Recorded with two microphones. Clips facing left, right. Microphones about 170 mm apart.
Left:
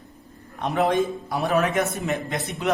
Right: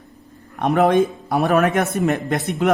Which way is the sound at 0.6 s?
55° right (ahead or behind).